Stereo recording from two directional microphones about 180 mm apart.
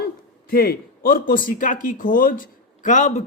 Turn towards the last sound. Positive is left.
turn(degrees=40)  # may be behind; listen again after turning